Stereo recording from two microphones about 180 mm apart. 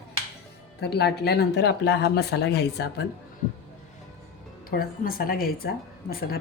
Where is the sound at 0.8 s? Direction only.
65° left (ahead or behind).